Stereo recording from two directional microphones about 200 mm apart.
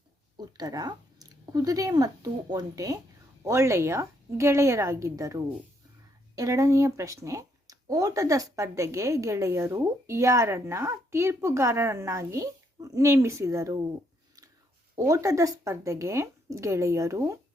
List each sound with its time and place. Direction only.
0.3 s speech: 20° right (ahead or behind)
14.9 s speech: 15° right (ahead or behind)